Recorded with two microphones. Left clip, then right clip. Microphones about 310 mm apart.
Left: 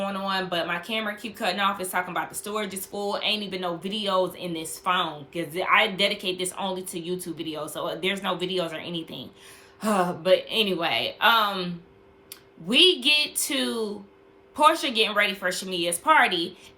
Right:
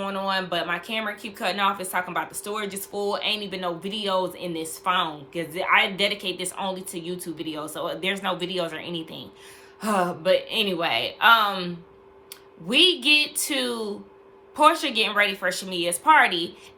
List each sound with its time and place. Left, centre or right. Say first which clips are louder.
0.0 s speech: right 1 dB; centre